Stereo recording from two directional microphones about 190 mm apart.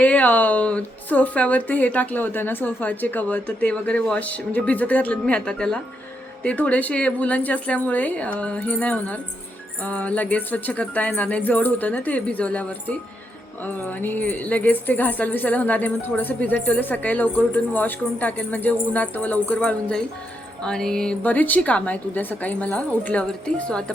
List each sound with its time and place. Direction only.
0.0 s speech: 5° left (ahead or behind)
13.8 s speech: 10° left (ahead or behind)